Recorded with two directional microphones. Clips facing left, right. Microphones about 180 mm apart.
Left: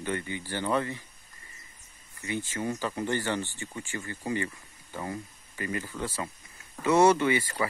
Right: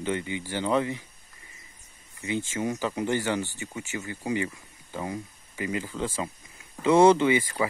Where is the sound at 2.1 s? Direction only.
20° right (ahead or behind).